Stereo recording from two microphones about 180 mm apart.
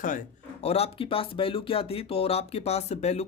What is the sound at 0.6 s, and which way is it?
Speech, 35° left (ahead or behind).